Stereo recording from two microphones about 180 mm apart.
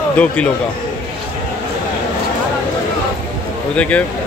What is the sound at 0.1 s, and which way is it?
Speech, 5° left (ahead or behind).